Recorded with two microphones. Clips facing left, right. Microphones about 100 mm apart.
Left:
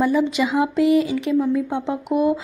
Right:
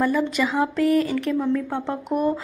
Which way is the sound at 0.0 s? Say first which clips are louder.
Left 3 dB; 10° left (ahead or behind).